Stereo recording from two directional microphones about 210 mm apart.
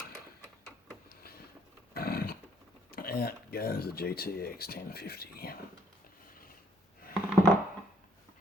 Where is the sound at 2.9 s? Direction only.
45° left (ahead or behind).